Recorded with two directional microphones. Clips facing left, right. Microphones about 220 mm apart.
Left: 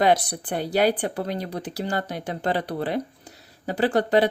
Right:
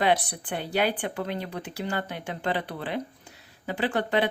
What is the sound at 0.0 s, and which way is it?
Speech, 40° left (ahead or behind).